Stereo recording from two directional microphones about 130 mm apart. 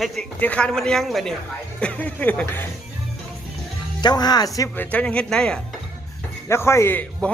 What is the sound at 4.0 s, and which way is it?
Speech, 30° left (ahead or behind).